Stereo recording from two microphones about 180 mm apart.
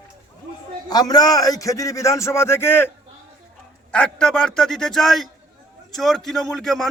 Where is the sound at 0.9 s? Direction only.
20° left (ahead or behind).